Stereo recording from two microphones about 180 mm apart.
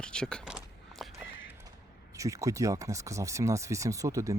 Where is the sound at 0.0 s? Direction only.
5° left (ahead or behind).